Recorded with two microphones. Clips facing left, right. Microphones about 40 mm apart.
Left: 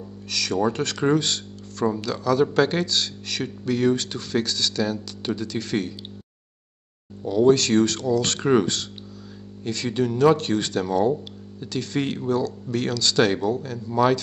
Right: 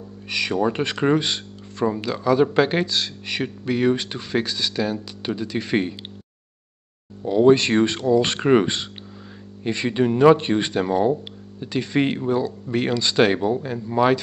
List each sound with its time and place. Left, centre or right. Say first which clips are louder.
0.3 s speech: right 2 dB; right
7.2 s speech: right 2 dB; right